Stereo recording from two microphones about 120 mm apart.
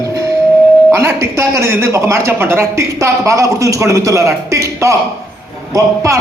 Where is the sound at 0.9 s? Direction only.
25° right (ahead or behind).